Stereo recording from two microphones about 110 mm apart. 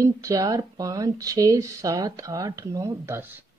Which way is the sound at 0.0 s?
30° right (ahead or behind).